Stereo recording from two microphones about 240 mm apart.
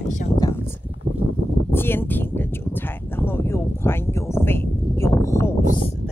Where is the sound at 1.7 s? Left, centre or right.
Centre.